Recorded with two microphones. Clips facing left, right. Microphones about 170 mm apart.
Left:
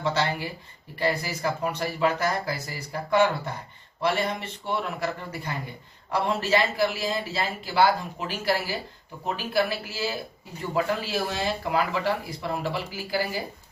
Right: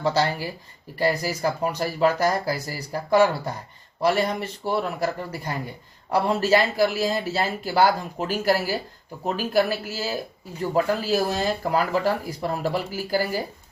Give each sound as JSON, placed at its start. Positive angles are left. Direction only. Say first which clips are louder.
{"t": 0.0, "sound": "speech", "louder": "right 3 dB", "side_deg": -35}